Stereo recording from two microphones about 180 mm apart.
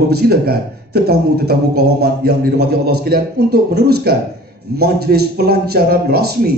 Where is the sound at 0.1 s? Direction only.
60° right (ahead or behind).